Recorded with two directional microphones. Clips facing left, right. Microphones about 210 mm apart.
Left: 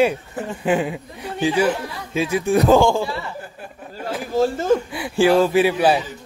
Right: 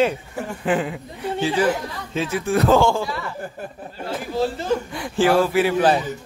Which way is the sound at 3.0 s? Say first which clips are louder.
Left 2 dB; 30° left (ahead or behind).